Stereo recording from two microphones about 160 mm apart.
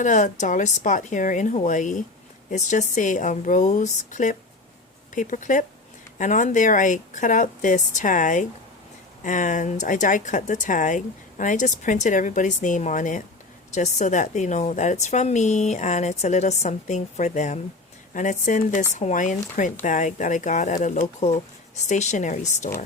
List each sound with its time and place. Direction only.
0.0 s speech: 50° left (ahead or behind)